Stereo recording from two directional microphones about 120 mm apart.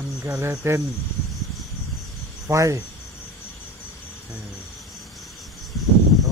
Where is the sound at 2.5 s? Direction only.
25° right (ahead or behind).